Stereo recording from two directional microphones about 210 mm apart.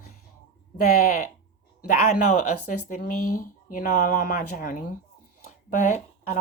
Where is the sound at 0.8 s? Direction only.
40° left (ahead or behind).